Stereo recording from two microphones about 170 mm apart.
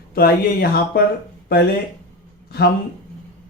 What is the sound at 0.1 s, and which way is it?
Speech, 65° left (ahead or behind).